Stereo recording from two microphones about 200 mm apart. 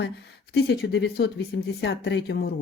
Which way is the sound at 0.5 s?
55° left (ahead or behind).